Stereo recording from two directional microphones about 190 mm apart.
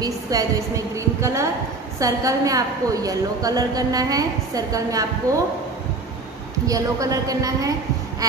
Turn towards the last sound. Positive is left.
turn(degrees=-20)  # may be behind; listen again after turning